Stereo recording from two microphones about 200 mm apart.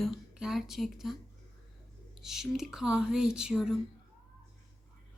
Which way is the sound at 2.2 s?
Centre (ahead or behind).